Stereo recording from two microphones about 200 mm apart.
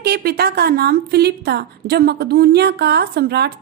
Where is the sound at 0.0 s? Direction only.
50° right (ahead or behind).